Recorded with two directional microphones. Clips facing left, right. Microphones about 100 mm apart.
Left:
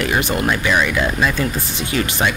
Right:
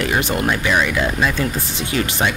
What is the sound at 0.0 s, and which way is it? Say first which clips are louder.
Music: even; 30° right (ahead or behind).